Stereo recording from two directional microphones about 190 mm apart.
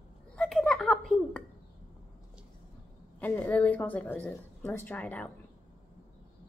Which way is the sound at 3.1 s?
10° left (ahead or behind).